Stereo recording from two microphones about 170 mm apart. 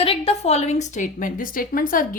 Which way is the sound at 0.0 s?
35° left (ahead or behind).